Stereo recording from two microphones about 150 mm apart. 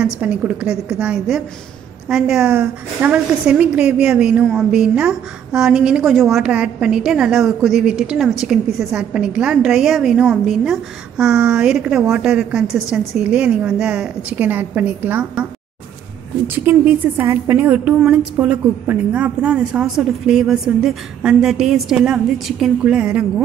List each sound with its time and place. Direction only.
0.0 s a woman's voice: 10° right (ahead or behind)
17.2 s a woman's voice: 15° right (ahead or behind)